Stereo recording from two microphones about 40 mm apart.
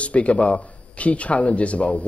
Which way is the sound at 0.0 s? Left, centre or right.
Left.